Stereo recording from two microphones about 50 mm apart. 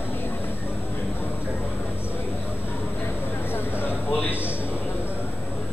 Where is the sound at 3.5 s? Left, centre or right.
Left.